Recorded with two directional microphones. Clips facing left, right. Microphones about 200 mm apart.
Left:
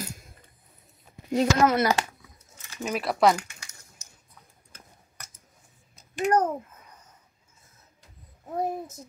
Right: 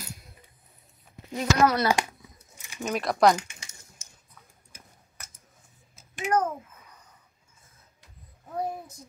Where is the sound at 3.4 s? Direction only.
20° right (ahead or behind).